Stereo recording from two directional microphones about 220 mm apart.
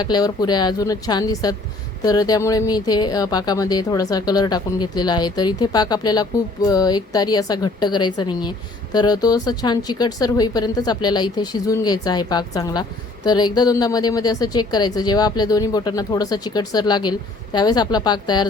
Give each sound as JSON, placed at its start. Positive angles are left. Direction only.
{"t": 0.0, "sound": "speech", "side_deg": 20}